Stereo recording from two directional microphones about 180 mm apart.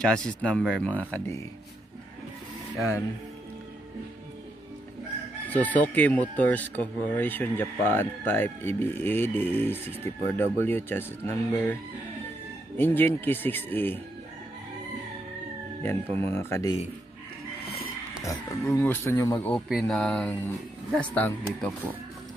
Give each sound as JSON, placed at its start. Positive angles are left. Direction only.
{"t": 0.0, "sound": "speech", "side_deg": 5}
{"t": 5.5, "sound": "speech", "side_deg": 10}
{"t": 12.7, "sound": "speech", "side_deg": 10}
{"t": 15.8, "sound": "speech", "side_deg": 10}
{"t": 18.2, "sound": "speech", "side_deg": 15}
{"t": 19.4, "sound": "speech", "side_deg": 5}